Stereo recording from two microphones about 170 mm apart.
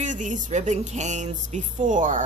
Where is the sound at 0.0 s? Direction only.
45° right (ahead or behind).